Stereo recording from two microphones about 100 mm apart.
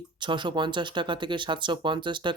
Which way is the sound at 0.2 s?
50° right (ahead or behind).